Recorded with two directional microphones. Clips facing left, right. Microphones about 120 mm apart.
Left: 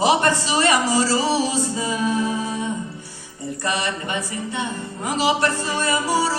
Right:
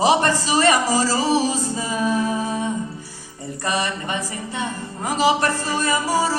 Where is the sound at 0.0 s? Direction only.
35° right (ahead or behind).